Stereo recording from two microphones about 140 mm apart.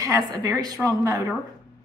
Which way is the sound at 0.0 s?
25° right (ahead or behind).